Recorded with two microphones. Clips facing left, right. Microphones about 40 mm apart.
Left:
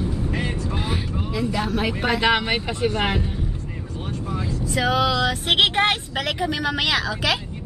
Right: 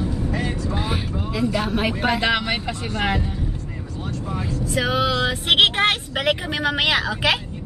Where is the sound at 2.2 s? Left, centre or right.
Centre.